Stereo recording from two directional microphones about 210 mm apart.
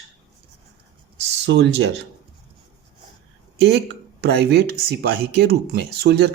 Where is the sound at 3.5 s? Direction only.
55° right (ahead or behind).